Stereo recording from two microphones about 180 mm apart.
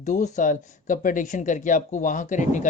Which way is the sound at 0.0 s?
40° left (ahead or behind).